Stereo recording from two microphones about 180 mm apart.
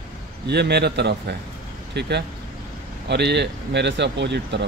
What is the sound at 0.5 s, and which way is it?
Speech, 65° right (ahead or behind).